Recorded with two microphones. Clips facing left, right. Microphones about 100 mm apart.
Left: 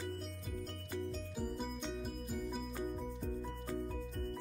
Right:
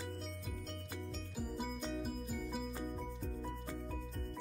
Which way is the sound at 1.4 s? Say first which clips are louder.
Even; centre (ahead or behind).